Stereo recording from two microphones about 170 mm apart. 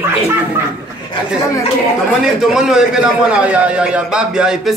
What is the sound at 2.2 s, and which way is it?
A man's voice, centre (ahead or behind).